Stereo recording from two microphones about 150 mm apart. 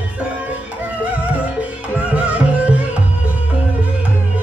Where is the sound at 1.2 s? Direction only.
10° right (ahead or behind).